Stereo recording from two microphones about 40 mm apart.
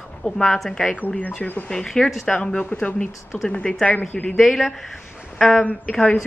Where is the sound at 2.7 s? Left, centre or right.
Left.